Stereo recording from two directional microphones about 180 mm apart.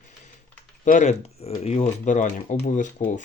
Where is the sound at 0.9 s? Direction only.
40° left (ahead or behind).